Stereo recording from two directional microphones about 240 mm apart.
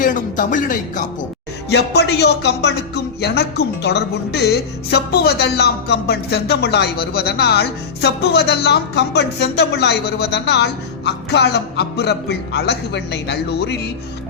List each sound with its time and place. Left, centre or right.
0.0 s speech: left